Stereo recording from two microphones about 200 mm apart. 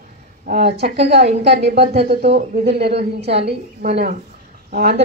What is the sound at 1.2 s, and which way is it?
Speech, 30° right (ahead or behind).